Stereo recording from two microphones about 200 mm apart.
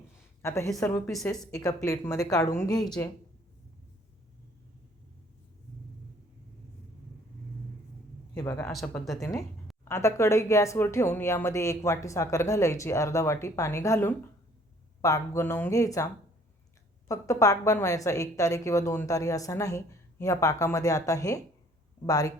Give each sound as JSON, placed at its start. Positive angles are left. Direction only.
{"t": 0.4, "sound": "a woman's voice", "side_deg": 15}
{"t": 8.4, "sound": "a woman's voice", "side_deg": 15}
{"t": 8.7, "sound": "speech", "side_deg": 0}
{"t": 9.9, "sound": "a woman's voice", "side_deg": 15}
{"t": 17.1, "sound": "a woman's voice", "side_deg": 15}